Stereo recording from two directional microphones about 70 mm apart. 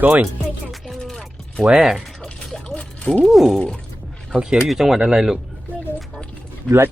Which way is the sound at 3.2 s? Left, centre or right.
Centre.